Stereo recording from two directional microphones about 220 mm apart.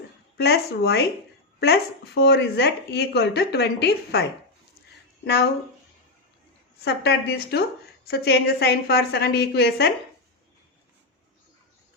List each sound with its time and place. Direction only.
0.3 s a woman's voice: 45° left (ahead or behind)
6.8 s speech: 50° left (ahead or behind)